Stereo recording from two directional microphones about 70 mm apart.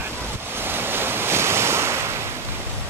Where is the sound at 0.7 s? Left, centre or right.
Right.